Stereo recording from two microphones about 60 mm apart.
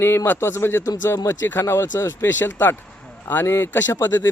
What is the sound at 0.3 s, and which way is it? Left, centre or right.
Speech, left.